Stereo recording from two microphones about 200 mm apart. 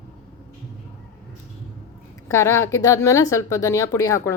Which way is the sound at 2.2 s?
15° left (ahead or behind).